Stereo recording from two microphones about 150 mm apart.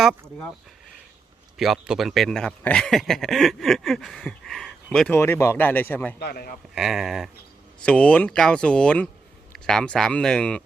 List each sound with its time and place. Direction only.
0.0 s speech: centre (ahead or behind)
1.5 s speech: centre (ahead or behind)
5.1 s speech: 15° left (ahead or behind)
6.1 s a man's voice: 90° left
6.7 s speech: centre (ahead or behind)